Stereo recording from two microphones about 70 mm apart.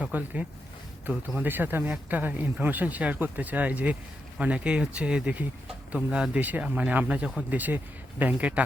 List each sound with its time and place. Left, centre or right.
0.0 s speech: right
6.4 s speech: right